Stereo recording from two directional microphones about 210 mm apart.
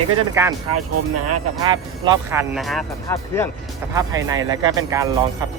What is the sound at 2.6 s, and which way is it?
Speech, centre (ahead or behind).